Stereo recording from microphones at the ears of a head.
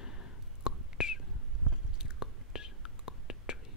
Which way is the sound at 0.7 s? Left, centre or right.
Left.